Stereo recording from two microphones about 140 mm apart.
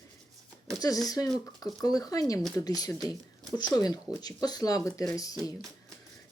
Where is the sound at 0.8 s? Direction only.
25° left (ahead or behind).